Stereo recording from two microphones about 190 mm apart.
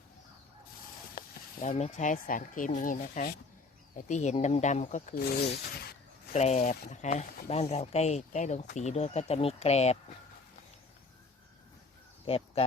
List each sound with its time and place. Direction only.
1.1 s speech: 45° left (ahead or behind)
6.3 s speech: 35° left (ahead or behind)
12.2 s a sound: 30° left (ahead or behind)